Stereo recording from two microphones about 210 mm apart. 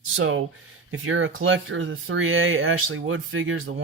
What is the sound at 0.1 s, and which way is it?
Speech, 70° right (ahead or behind).